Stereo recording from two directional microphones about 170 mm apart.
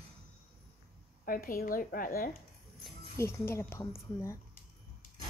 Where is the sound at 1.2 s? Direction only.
55° left (ahead or behind).